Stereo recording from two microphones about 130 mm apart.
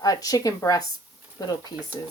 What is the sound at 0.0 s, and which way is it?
A woman's voice, 30° left (ahead or behind).